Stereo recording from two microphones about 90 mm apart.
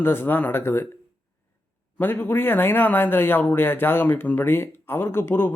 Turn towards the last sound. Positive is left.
turn(degrees=25)  # may be behind; listen again after turning